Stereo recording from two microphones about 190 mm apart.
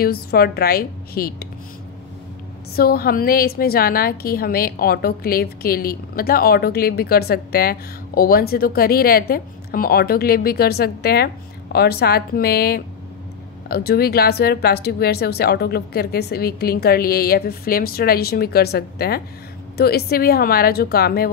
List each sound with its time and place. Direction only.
0.0 s a woman's voice: 55° left (ahead or behind)
2.7 s a woman's voice: 55° left (ahead or behind)